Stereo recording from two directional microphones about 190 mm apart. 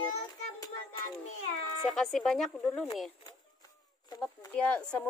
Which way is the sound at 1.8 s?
Centre (ahead or behind).